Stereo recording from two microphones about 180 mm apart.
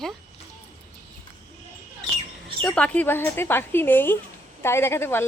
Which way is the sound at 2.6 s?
5° left (ahead or behind).